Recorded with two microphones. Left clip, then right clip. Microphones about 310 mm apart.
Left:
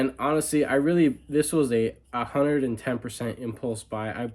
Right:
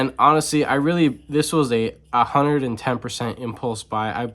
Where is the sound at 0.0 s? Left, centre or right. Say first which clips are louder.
Right 9 dB; centre.